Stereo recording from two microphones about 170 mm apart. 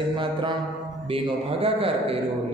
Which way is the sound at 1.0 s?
35° right (ahead or behind).